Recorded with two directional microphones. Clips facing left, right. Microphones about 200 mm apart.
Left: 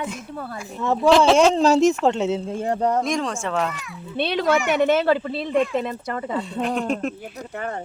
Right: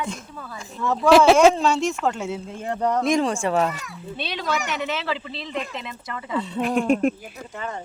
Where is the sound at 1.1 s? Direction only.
10° right (ahead or behind).